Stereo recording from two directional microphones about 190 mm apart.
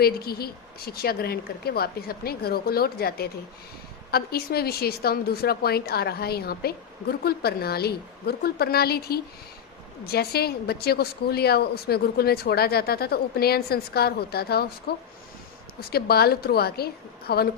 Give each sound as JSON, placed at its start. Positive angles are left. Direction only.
{"t": 0.0, "sound": "a woman's voice", "side_deg": 55}